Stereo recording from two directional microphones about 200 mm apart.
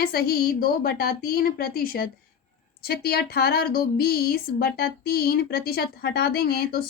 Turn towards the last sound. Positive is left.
turn(degrees=50)  # may be behind; listen again after turning